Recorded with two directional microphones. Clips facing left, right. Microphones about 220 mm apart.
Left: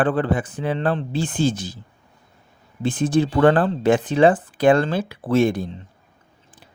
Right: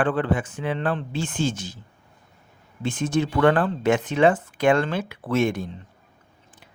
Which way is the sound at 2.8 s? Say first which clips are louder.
Left 4 dB; 35° left (ahead or behind).